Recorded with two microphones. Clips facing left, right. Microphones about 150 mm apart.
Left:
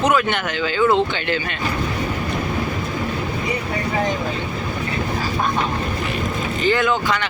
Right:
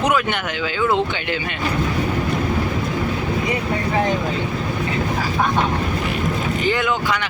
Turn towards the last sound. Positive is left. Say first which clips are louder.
# left 2 dB
turn(degrees=-15)  # may be behind; listen again after turning